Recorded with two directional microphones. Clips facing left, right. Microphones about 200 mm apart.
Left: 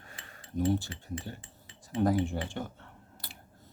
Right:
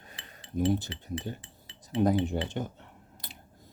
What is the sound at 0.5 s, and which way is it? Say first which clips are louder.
Speech: right 1 dB; 15° right (ahead or behind).